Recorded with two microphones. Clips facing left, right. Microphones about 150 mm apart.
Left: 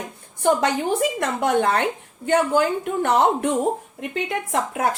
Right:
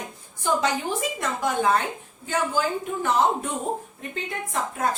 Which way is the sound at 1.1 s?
70° left (ahead or behind).